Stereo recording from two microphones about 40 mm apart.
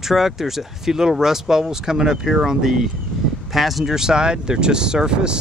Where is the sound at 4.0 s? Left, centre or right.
Centre.